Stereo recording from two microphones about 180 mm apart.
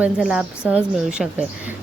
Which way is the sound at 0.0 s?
5° right (ahead or behind).